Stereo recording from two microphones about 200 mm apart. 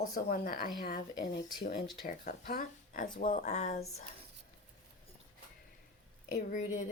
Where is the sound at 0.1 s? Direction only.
45° left (ahead or behind).